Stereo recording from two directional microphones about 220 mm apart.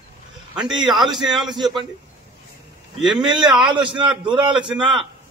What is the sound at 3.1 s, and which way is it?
A man's voice, 20° right (ahead or behind).